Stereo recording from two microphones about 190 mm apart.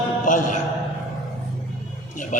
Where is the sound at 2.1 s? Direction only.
45° left (ahead or behind).